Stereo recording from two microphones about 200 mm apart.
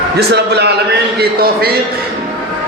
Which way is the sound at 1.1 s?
50° right (ahead or behind).